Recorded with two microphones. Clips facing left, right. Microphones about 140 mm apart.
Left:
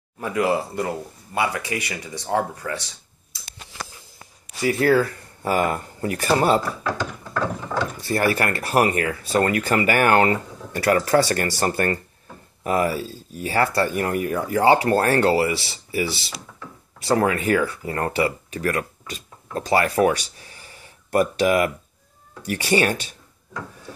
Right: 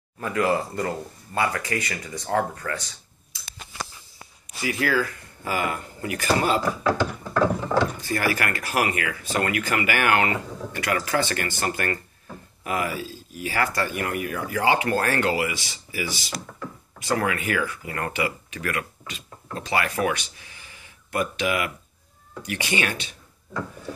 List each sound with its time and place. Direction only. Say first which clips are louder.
0.2 s speech: left 1 dB; 15° left (ahead or behind)
4.6 s speech: left 6 dB; 35° left (ahead or behind)
8.0 s speech: left 4 dB; 30° left (ahead or behind)